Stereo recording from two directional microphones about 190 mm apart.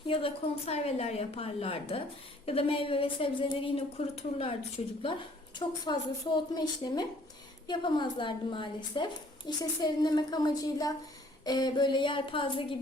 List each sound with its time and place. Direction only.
0.0 s a woman's voice: 30° left (ahead or behind)